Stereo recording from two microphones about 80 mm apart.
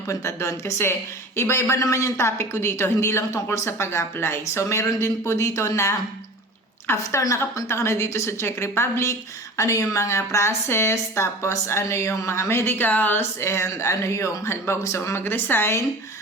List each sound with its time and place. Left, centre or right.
0.1 s a woman's voice: left